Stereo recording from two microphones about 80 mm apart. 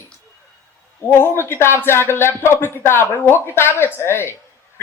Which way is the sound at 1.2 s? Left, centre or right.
Left.